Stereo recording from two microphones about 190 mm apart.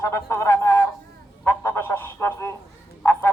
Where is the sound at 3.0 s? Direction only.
10° left (ahead or behind).